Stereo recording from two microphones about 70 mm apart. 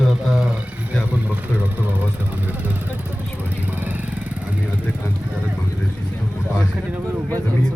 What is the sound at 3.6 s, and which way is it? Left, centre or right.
Speech, right.